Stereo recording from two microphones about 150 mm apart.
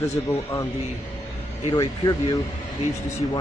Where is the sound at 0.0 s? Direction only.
20° left (ahead or behind).